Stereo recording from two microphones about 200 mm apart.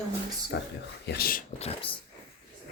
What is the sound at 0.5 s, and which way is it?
Speech, 60° left (ahead or behind).